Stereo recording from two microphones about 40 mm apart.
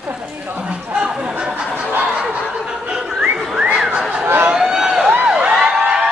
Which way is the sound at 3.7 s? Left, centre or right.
Right.